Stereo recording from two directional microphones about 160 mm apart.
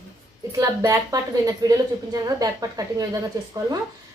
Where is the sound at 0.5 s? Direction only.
20° right (ahead or behind).